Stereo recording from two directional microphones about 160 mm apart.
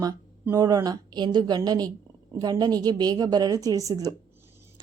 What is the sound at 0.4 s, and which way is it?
A woman's voice, 20° right (ahead or behind).